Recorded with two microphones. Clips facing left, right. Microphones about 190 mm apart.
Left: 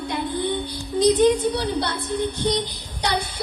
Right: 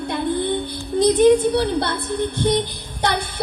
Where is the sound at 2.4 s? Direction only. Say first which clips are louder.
Right 7 dB; 55° right (ahead or behind).